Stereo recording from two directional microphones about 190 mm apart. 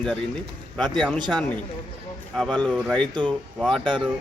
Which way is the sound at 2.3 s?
5° left (ahead or behind).